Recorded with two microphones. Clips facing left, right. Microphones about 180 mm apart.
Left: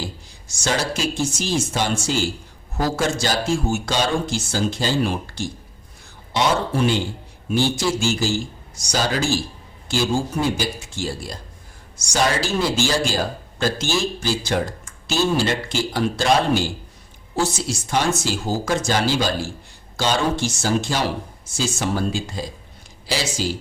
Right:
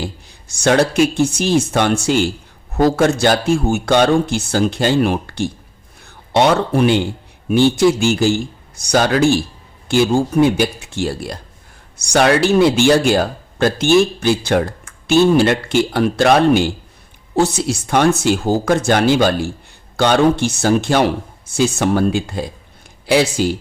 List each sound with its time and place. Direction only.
0.0 s speech: 60° right (ahead or behind)